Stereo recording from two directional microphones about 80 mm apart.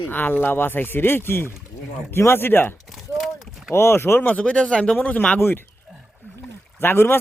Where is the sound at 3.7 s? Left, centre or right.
Left.